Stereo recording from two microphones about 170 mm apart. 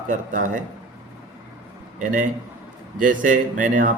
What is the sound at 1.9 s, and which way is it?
A man's voice, 45° right (ahead or behind).